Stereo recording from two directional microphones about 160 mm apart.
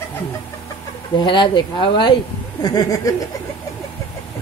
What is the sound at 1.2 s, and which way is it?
Speech, 30° left (ahead or behind).